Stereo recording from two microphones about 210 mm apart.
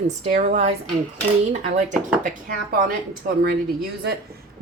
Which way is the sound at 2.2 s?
40° right (ahead or behind).